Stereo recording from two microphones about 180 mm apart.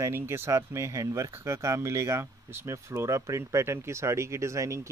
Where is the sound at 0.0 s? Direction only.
15° right (ahead or behind).